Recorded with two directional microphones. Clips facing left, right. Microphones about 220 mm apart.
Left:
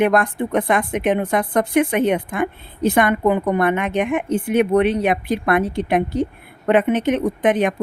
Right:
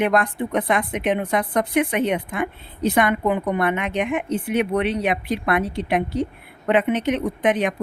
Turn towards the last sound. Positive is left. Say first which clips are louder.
# left 3 dB
turn(degrees=50)  # may be behind; listen again after turning